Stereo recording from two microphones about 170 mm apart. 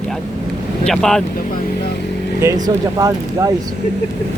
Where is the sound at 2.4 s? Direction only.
20° right (ahead or behind).